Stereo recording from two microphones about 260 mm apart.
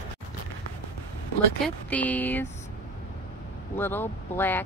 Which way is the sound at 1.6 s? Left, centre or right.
Centre.